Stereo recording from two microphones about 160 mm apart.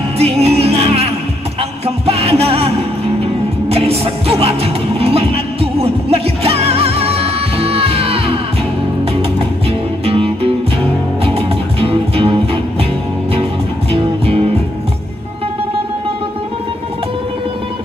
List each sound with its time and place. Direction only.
0.2 s music: 40° right (ahead or behind)
9.7 s music: 35° right (ahead or behind)
13.9 s music: 40° right (ahead or behind)